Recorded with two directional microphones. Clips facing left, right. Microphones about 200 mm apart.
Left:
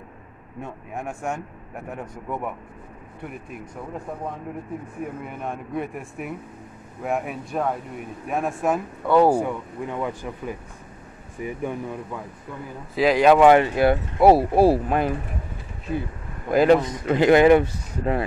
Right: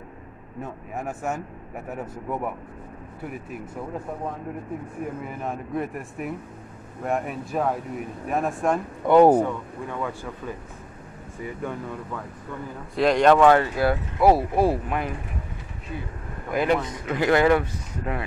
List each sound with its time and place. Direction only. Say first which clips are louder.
0.6 s speech: even; 5° right (ahead or behind)
5.2 s speech: right 1 dB; centre (ahead or behind)
9.0 s speech: right 2 dB; 20° right (ahead or behind)
9.3 s speech: right 2 dB; 15° left (ahead or behind)
12.9 s speech: left 1 dB; 5° left (ahead or behind); by 15.1 s 35° left (ahead or behind)
16.4 s speech: left 6 dB; 35° left (ahead or behind)